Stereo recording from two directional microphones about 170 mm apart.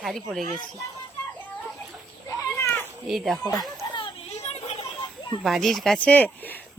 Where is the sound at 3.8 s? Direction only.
25° left (ahead or behind).